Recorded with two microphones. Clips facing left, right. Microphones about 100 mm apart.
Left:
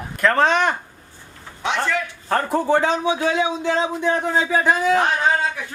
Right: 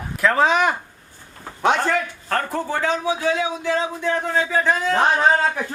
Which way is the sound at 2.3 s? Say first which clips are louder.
Left 7 dB; 15° left (ahead or behind).